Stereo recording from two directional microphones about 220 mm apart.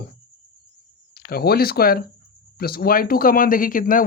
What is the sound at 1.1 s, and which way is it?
Speech, 45° left (ahead or behind).